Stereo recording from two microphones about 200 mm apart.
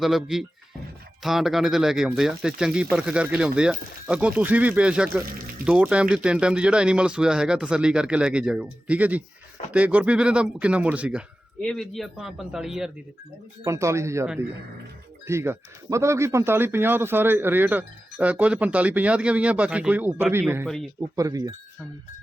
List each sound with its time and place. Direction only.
0.0 s speech: centre (ahead or behind)
13.7 s speech: 15° right (ahead or behind)
15.3 s speech: 15° right (ahead or behind)